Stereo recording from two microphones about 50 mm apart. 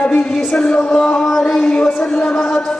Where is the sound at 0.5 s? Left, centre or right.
Centre.